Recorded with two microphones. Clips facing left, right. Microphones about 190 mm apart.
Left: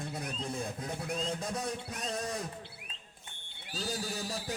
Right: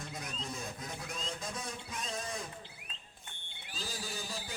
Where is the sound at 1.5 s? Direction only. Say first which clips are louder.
Left 5 dB; 65° left (ahead or behind).